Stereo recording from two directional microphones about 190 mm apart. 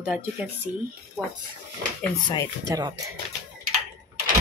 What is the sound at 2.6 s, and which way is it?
Speech, 15° right (ahead or behind).